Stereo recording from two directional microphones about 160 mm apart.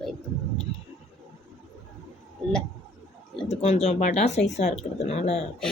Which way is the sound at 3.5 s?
40° left (ahead or behind).